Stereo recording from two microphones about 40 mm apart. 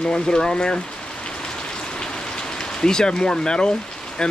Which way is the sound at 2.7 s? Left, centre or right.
Centre.